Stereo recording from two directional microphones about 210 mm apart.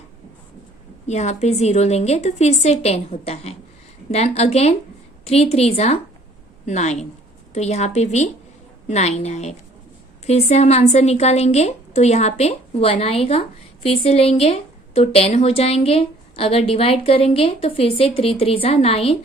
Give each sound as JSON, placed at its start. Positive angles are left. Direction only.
{"t": 1.0, "sound": "a woman's voice", "side_deg": 35}